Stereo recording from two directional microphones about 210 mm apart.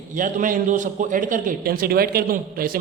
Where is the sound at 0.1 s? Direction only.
40° right (ahead or behind).